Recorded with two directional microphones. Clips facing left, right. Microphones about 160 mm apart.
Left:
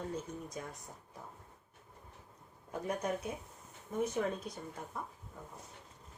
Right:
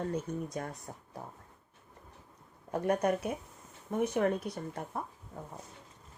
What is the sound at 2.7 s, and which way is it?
Speech, 70° right (ahead or behind).